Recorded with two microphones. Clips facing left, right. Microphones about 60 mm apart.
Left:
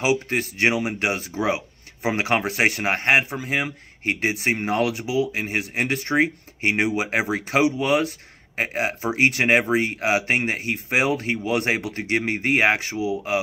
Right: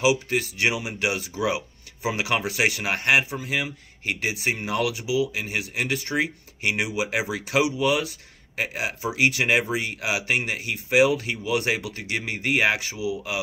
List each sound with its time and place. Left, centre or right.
0.0 s speech: left